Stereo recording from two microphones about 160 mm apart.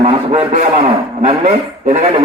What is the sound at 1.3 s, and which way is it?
Speech, 45° right (ahead or behind).